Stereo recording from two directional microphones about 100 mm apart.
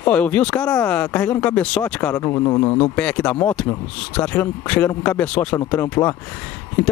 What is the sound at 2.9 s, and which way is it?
A man's voice, 10° left (ahead or behind).